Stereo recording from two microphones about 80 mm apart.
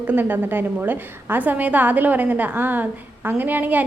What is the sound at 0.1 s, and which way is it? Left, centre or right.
A woman's voice, right.